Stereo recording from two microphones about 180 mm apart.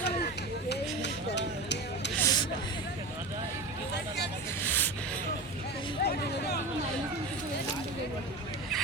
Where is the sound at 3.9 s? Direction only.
70° left (ahead or behind).